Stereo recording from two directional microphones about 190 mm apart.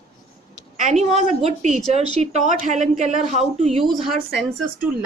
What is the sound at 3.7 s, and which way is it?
Speech, centre (ahead or behind).